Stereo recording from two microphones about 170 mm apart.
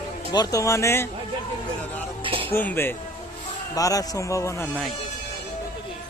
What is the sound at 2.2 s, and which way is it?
Music, 30° right (ahead or behind).